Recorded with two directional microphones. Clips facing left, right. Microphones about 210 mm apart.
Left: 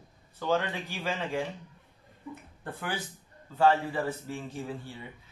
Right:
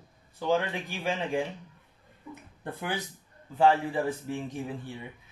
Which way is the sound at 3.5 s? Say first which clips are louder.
Right 1 dB; 15° right (ahead or behind).